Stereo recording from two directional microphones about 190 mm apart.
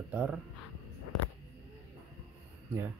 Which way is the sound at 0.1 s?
5° right (ahead or behind).